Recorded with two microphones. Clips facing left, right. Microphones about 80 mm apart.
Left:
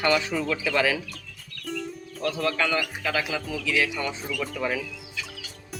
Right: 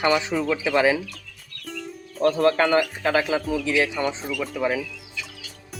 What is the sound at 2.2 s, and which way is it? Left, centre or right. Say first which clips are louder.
Speech: right 8 dB; right.